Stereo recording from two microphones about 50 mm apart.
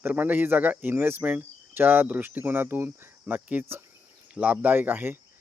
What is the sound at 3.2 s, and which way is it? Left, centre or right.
Speech, right.